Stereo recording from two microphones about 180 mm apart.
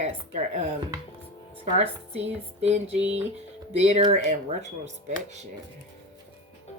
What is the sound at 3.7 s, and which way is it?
Speech, 35° right (ahead or behind).